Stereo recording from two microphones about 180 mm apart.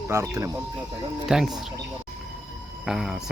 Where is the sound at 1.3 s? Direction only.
Centre (ahead or behind).